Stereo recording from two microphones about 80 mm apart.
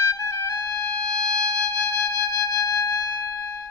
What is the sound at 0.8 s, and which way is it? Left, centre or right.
Music, centre.